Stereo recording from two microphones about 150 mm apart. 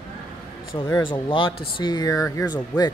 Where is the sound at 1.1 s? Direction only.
35° left (ahead or behind).